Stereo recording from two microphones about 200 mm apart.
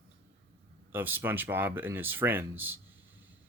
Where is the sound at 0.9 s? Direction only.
10° right (ahead or behind).